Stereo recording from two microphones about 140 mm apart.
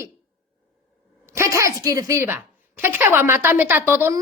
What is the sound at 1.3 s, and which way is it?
A woman's voice, 20° right (ahead or behind).